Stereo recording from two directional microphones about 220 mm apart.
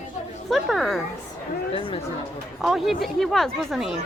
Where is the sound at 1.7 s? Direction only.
25° left (ahead or behind).